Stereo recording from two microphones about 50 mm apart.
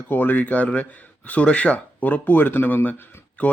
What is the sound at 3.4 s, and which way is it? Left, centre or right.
Speech, left.